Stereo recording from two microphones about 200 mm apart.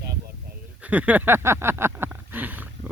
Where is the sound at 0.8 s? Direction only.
5° right (ahead or behind).